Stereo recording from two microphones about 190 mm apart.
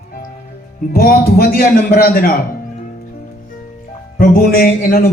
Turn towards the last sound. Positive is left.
turn(degrees=50)  # may be behind; listen again after turning